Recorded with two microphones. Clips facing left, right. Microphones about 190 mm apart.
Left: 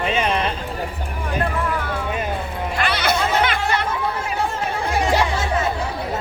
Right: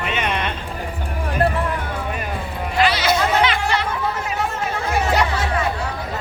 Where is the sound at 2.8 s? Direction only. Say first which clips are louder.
Right 4 dB; 55° left (ahead or behind).